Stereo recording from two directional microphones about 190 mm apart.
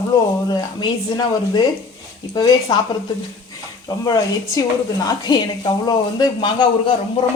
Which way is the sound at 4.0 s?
20° left (ahead or behind).